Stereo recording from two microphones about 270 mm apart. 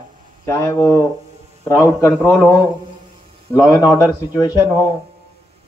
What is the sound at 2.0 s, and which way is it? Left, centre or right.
Speech, centre.